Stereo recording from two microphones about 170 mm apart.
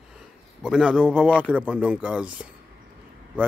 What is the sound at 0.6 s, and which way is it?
Speech, 5° right (ahead or behind).